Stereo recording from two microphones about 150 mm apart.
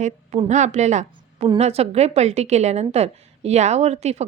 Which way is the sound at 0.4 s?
50° right (ahead or behind).